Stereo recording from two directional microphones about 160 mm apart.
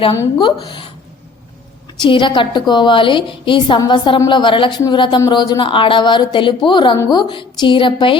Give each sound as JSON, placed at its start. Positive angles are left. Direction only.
{"t": 0.3, "sound": "a woman's voice", "side_deg": 30}
{"t": 2.0, "sound": "a woman's voice", "side_deg": 30}